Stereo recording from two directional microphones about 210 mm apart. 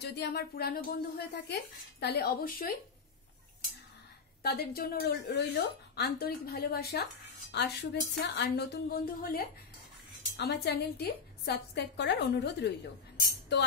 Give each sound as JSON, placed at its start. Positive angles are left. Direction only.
{"t": 0.0, "sound": "speech", "side_deg": 55}
{"t": 4.4, "sound": "speech", "side_deg": 50}
{"t": 13.5, "sound": "music", "side_deg": 55}